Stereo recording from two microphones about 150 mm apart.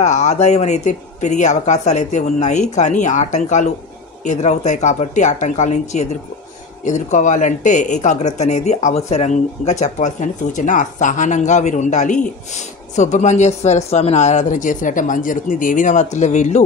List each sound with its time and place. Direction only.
0.0 s speech: 50° left (ahead or behind)